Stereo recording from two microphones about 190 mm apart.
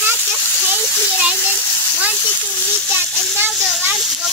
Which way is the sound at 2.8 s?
5° left (ahead or behind).